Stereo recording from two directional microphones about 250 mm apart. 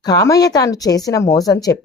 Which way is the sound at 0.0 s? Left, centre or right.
Centre.